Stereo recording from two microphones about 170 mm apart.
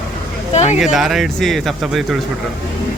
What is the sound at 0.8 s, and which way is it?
Speech, centre (ahead or behind).